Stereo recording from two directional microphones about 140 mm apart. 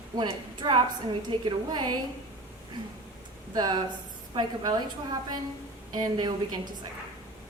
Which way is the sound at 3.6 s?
30° right (ahead or behind).